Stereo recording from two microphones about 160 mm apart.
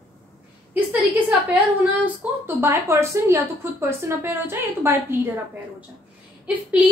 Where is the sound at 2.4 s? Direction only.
15° right (ahead or behind).